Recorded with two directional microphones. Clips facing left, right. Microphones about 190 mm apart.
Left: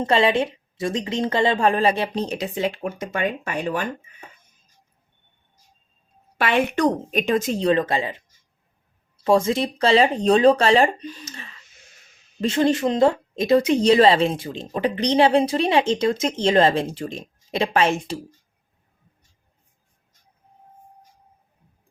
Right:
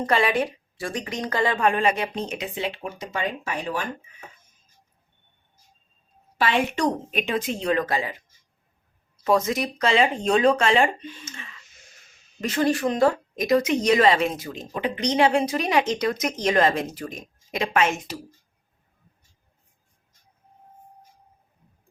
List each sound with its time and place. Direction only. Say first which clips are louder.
0.0 s a woman's voice: left 3 dB; 25° left (ahead or behind); by 3.8 s 55° left (ahead or behind)
6.3 s a woman's voice: left 3 dB; 55° left (ahead or behind); by 11.6 s 35° left (ahead or behind)
12.4 s speech: left 3 dB; 25° left (ahead or behind)